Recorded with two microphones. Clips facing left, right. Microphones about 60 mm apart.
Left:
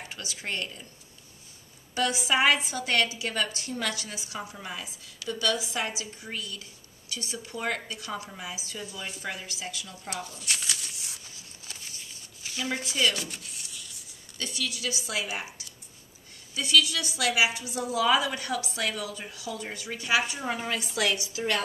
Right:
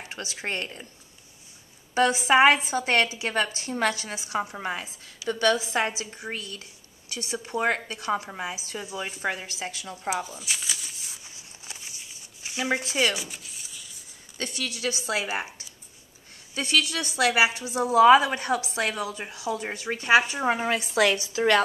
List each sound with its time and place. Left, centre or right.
0.1 s speech: right
2.0 s speech: right
10.0 s a sound: centre
11.2 s a sound: centre
13.1 s rub: centre
14.4 s speech: right
21.4 s a woman's voice: right